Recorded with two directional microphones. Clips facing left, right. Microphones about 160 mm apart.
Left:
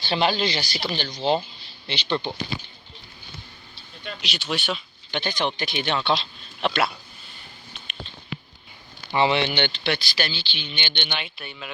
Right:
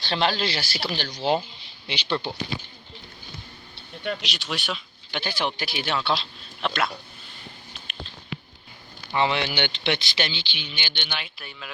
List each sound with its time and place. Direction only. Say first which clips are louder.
0.0 s speech: left 2 dB; 5° left (ahead or behind)
3.8 s a sound: right 7 dB; 60° right (ahead or behind)
4.2 s speech: left 3 dB; centre (ahead or behind)
9.1 s speech: left 3 dB; 5° left (ahead or behind)
9.4 s speech: left 2 dB; 10° right (ahead or behind)